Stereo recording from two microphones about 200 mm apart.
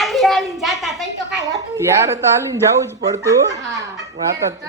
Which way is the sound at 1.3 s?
20° right (ahead or behind).